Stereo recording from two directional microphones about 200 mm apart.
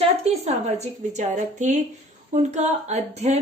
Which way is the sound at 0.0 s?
35° right (ahead or behind).